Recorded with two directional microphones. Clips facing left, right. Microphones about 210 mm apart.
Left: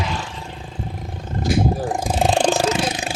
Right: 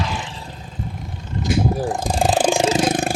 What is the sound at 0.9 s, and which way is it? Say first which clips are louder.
Vehicle: left 2 dB; 50° left (ahead or behind).